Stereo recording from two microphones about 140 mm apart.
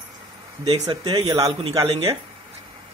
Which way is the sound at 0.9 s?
30° right (ahead or behind).